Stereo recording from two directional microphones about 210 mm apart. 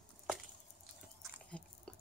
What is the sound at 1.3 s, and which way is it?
Biting, 5° left (ahead or behind).